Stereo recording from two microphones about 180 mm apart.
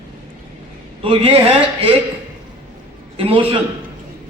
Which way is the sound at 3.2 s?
30° right (ahead or behind).